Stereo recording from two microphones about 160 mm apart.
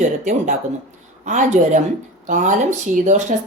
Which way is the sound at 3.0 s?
50° right (ahead or behind).